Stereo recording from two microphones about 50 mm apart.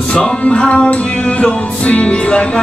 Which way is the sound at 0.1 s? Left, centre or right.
Centre.